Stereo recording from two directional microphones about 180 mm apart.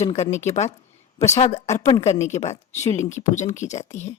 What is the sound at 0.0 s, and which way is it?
Speech, 35° left (ahead or behind).